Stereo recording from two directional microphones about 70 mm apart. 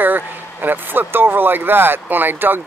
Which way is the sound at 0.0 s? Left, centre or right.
Right.